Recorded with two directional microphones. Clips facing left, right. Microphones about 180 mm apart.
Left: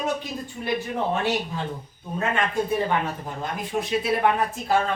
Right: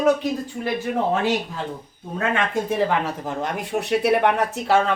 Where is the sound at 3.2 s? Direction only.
75° right (ahead or behind).